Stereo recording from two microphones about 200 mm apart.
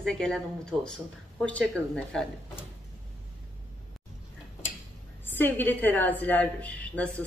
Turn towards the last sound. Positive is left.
turn(degrees=5)  # may be behind; listen again after turning